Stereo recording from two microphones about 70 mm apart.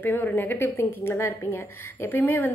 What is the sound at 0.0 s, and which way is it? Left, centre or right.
A woman's voice, left.